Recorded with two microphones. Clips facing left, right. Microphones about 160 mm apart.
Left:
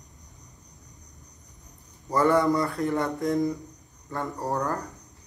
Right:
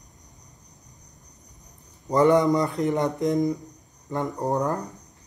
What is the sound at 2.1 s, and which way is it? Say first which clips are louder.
A man's voice: right 3 dB; 20° right (ahead or behind).